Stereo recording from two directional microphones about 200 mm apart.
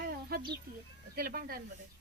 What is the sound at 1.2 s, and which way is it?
Speech, 50° right (ahead or behind).